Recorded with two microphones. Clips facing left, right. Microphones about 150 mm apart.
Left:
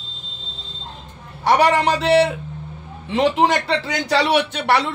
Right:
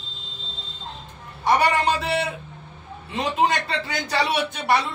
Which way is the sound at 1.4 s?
85° left.